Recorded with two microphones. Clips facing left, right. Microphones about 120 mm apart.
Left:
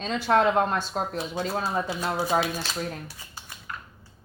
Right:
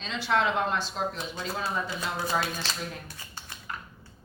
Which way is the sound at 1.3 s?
35° left (ahead or behind).